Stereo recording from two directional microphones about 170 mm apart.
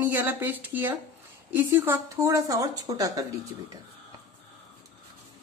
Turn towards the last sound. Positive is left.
turn(degrees=-20)  # may be behind; listen again after turning